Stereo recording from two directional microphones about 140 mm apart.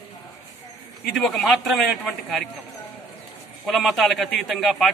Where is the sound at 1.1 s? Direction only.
Centre (ahead or behind).